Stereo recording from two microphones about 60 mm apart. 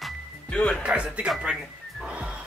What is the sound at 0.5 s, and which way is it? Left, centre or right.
Speech, centre.